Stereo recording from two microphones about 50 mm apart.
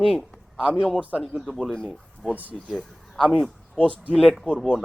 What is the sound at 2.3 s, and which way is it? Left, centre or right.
Speech, right.